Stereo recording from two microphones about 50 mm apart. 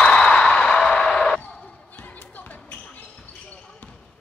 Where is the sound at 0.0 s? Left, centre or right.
Centre.